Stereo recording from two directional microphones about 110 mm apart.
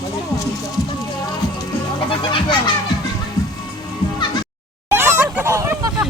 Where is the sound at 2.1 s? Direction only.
50° left (ahead or behind).